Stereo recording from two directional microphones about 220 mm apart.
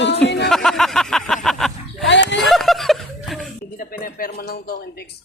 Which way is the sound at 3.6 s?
40° left (ahead or behind).